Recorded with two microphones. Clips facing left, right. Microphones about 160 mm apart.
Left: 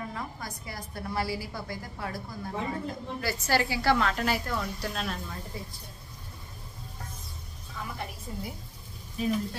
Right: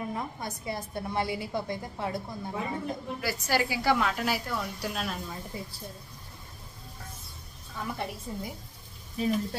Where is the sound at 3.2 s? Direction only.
10° right (ahead or behind).